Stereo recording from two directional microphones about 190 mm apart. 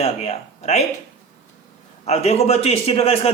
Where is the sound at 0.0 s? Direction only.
35° left (ahead or behind).